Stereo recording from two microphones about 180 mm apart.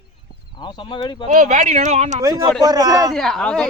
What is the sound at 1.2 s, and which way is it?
Speech, 45° right (ahead or behind).